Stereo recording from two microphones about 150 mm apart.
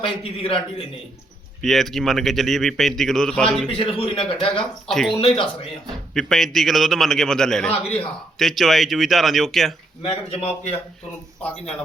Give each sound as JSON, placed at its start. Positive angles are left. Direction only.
{"t": 0.0, "sound": "speech", "side_deg": 40}
{"t": 1.6, "sound": "a man's voice", "side_deg": 0}
{"t": 3.7, "sound": "speech", "side_deg": 35}
{"t": 4.9, "sound": "a man's voice", "side_deg": 0}
{"t": 5.2, "sound": "speech", "side_deg": 35}
{"t": 6.1, "sound": "a man's voice", "side_deg": 0}
{"t": 10.0, "sound": "speech", "side_deg": 40}